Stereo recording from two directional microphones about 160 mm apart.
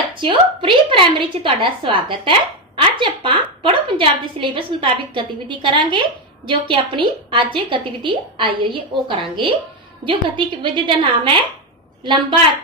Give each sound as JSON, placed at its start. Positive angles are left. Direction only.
{"t": 0.2, "sound": "a woman's voice", "side_deg": -35}